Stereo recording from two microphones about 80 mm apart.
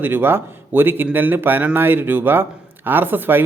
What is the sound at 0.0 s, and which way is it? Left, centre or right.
Speech, right.